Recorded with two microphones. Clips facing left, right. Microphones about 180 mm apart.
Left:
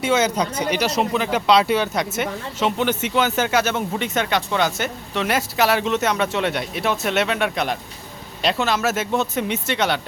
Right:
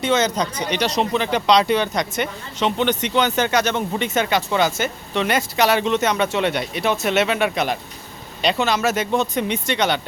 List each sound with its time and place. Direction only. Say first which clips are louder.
0.0 s speech: even; 10° left (ahead or behind)